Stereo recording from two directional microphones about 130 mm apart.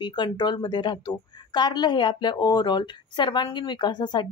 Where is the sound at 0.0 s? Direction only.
35° left (ahead or behind).